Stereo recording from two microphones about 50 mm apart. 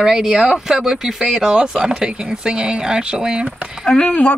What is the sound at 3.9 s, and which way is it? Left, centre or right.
Speech, left.